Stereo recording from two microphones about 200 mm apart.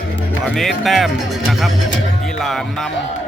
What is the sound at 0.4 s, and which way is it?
Speech, centre (ahead or behind).